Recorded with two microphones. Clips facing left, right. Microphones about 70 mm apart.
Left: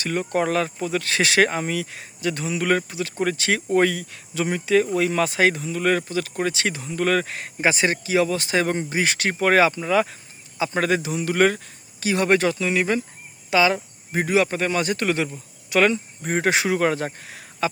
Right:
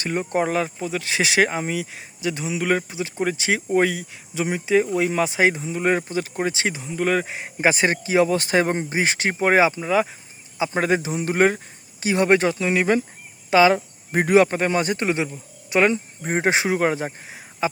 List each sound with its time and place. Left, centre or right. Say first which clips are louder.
0.1 s speech: even; centre
7.6 s speech: right 1 dB; right
14.1 s speech: right 4 dB; right; by 17.7 s centre